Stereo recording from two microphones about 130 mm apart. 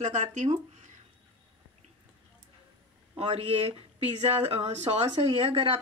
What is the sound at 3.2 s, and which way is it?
Speech, 50° right (ahead or behind).